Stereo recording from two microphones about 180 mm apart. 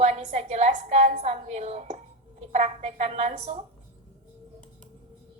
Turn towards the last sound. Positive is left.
turn(degrees=-35)  # may be behind; listen again after turning